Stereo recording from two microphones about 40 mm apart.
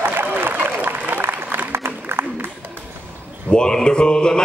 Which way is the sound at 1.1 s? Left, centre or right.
Right.